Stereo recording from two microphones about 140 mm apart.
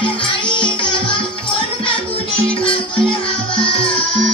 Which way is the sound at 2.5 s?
40° left (ahead or behind).